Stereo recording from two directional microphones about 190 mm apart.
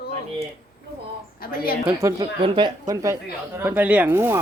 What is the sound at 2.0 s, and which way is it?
Speech, 25° right (ahead or behind).